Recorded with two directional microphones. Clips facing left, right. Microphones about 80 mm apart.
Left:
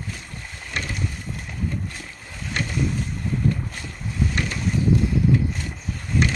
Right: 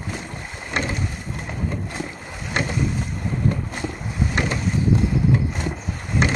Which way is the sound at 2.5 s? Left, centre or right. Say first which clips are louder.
Right 4 dB; right.